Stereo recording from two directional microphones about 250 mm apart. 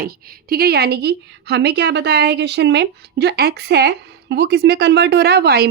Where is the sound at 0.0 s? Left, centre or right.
Right.